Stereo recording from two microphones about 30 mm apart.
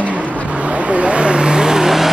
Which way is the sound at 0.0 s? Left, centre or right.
Right.